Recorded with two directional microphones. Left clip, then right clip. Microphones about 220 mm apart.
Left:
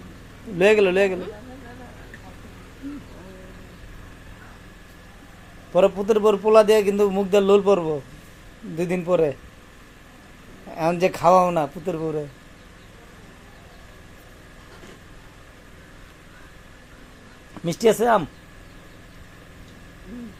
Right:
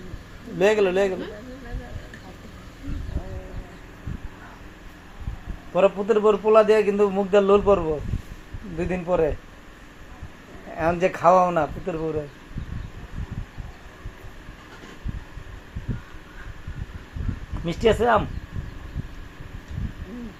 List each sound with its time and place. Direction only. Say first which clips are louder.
0.6 s a man's voice: left 3 dB; 25° left (ahead or behind)
5.7 s a man's voice: left 1 dB; 45° left (ahead or behind)
10.8 s a man's voice: left 1 dB; 40° left (ahead or behind)
17.7 s a man's voice: left 1 dB; 45° left (ahead or behind)